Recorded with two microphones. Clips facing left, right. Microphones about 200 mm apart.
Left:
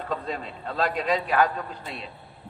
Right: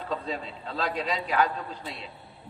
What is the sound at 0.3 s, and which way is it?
A man's voice, 50° left (ahead or behind).